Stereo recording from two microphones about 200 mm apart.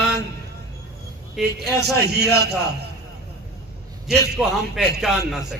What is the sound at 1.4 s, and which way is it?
Speech, centre (ahead or behind).